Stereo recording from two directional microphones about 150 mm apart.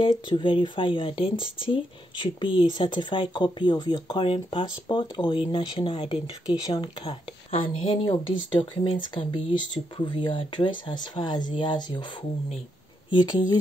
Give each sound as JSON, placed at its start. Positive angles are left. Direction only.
{"t": 0.0, "sound": "speech", "side_deg": 30}
{"t": 6.4, "sound": "speech", "side_deg": 25}